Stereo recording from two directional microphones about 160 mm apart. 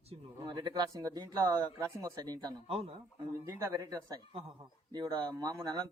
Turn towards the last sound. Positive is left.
turn(degrees=-25)  # may be behind; listen again after turning